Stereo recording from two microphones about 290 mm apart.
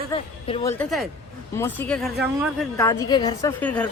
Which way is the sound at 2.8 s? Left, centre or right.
Centre.